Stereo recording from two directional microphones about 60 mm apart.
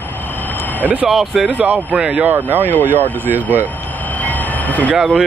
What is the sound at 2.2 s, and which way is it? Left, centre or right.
Speech, right.